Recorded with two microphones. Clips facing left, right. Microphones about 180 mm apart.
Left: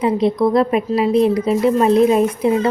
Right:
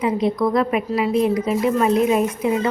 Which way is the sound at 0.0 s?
35° left (ahead or behind).